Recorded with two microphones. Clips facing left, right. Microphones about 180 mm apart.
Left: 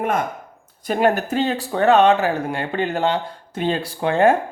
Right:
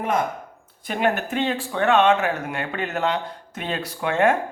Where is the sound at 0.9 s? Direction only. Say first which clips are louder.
Left 5 dB; 40° left (ahead or behind).